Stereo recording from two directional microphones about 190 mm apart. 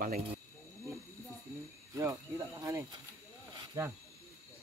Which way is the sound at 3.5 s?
20° right (ahead or behind).